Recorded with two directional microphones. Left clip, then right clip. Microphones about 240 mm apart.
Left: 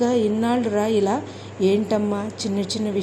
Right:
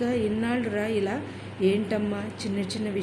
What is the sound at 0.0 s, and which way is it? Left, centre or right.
A woman's voice, centre.